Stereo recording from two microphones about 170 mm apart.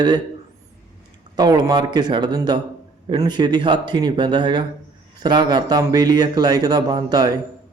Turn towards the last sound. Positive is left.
turn(degrees=-25)  # may be behind; listen again after turning